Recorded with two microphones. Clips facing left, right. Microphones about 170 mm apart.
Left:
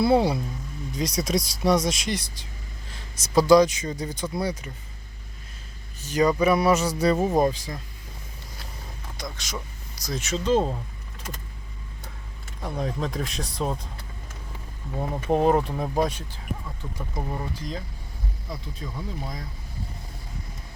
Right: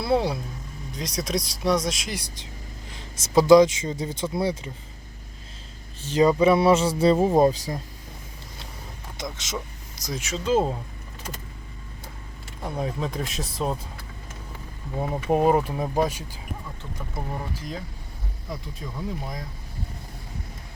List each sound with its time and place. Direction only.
0.0 s speech: centre (ahead or behind)
2.9 s speech: 25° right (ahead or behind)
6.0 s speech: 30° right (ahead or behind)
7.5 s speech: 40° right (ahead or behind)
9.2 s speech: 20° right (ahead or behind)
10.0 s speech: 10° right (ahead or behind)
12.6 s speech: 5° right (ahead or behind)
14.9 s speech: 10° right (ahead or behind)